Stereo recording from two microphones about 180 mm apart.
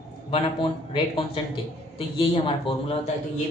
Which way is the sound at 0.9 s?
30° left (ahead or behind).